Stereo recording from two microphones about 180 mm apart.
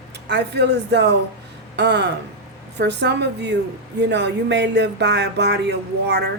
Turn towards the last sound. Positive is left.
turn(degrees=-70)  # may be behind; listen again after turning